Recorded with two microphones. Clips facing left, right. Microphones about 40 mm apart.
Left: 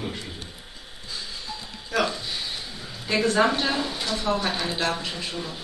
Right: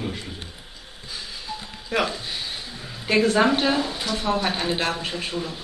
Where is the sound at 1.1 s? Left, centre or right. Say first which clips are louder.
Right 1 dB; centre.